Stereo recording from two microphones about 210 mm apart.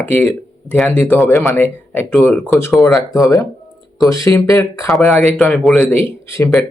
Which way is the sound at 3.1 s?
15° left (ahead or behind).